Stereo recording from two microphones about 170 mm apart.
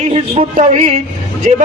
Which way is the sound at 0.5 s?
45° right (ahead or behind).